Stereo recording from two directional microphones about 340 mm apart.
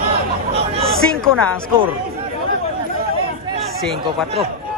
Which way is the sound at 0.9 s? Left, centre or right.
Centre.